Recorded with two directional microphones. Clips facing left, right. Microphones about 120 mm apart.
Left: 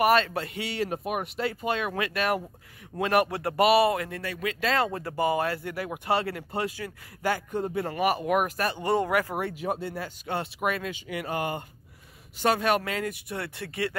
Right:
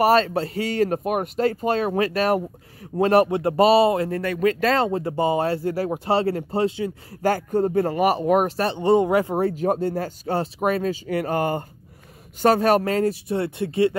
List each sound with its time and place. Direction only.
0.0 s speech: 35° right (ahead or behind)
4.1 s speech: 45° right (ahead or behind)
4.7 s speech: 25° right (ahead or behind)
7.2 s speech: 40° right (ahead or behind); by 9.5 s 25° right (ahead or behind)
9.5 s speech: 45° right (ahead or behind); by 13.9 s 25° right (ahead or behind)